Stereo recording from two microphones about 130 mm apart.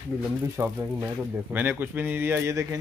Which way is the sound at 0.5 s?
15° right (ahead or behind).